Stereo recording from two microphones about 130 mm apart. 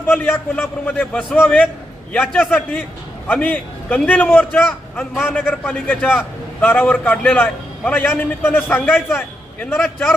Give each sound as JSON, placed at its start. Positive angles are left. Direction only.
{"t": 0.0, "sound": "a man's voice", "side_deg": 15}
{"t": 9.7, "sound": "a man's voice", "side_deg": 5}